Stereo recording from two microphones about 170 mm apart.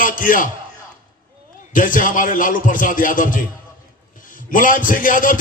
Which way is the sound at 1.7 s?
55° left (ahead or behind).